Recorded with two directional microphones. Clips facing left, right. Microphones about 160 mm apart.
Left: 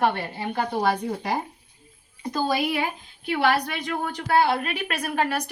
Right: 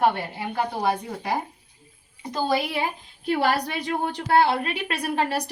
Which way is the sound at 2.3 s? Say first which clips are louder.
Even; 30° right (ahead or behind).